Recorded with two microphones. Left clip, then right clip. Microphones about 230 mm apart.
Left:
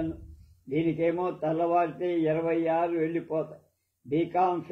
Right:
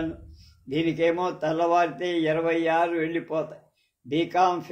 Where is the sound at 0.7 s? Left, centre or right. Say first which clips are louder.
Right 3 dB; right.